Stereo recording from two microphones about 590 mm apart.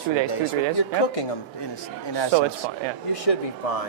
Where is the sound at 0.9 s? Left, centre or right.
Left.